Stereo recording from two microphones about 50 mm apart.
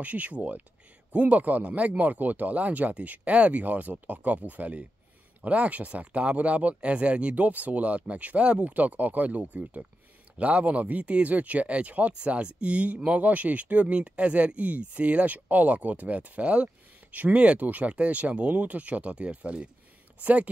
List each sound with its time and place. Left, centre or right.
0.0 s speech: right